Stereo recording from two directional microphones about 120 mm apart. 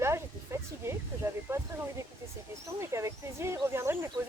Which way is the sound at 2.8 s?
25° right (ahead or behind).